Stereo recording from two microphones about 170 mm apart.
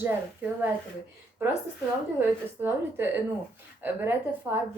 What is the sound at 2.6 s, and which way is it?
A woman's voice, 10° right (ahead or behind).